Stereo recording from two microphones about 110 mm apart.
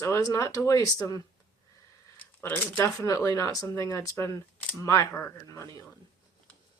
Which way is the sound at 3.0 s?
30° left (ahead or behind).